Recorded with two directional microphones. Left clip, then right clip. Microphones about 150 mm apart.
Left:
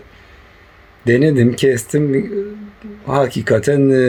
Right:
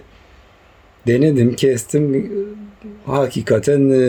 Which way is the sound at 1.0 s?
15° right (ahead or behind).